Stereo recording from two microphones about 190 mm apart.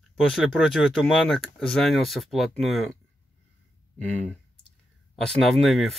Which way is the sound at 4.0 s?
10° left (ahead or behind).